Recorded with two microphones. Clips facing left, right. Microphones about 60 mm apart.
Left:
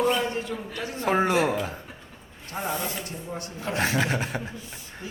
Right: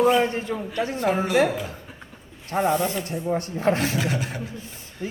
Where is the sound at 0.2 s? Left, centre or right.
Right.